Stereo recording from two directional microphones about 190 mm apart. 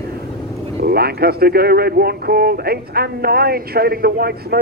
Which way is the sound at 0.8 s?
55° right (ahead or behind).